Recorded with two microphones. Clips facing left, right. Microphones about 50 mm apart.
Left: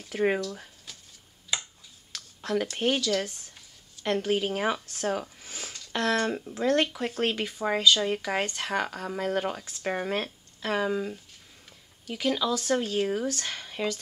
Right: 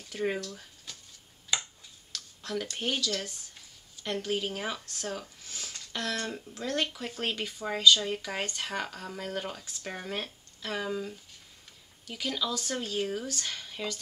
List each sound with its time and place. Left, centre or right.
0.1 s speech: left
0.4 s speech: centre
0.9 s a sound: centre
2.1 s a sound: left
2.8 s speech: centre
9.8 s speech: left